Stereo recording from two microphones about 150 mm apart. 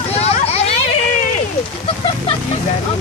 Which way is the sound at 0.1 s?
45° left (ahead or behind).